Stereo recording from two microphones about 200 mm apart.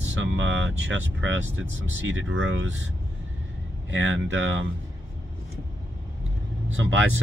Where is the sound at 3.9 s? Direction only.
70° right (ahead or behind).